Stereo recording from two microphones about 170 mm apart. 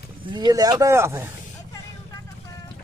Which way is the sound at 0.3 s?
25° right (ahead or behind).